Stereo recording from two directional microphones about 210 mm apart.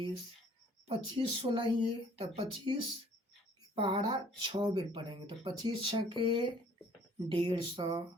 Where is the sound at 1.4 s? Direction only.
25° right (ahead or behind).